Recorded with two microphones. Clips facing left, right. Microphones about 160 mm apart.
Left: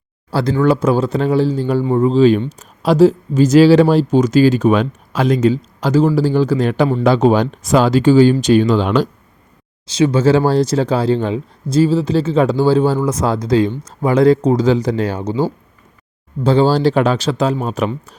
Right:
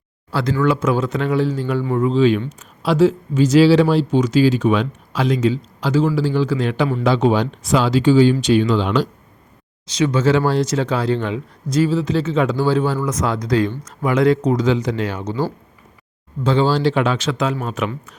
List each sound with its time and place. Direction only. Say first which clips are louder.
0.3 s speech: left 4 dB; 35° left (ahead or behind)
9.8 s speech: left 4 dB; 30° left (ahead or behind)